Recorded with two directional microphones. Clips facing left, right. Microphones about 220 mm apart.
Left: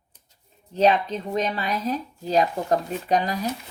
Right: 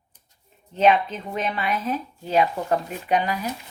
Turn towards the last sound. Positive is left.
turn(degrees=35)  # may be behind; listen again after turning